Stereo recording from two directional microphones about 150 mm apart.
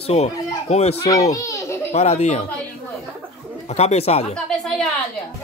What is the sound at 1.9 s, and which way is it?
Speech, 45° left (ahead or behind).